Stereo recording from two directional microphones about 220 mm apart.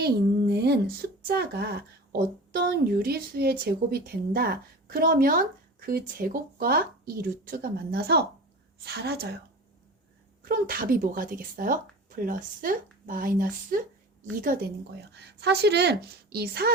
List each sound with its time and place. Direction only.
0.0 s a woman's voice: 45° right (ahead or behind)
10.4 s a woman's voice: 40° right (ahead or behind)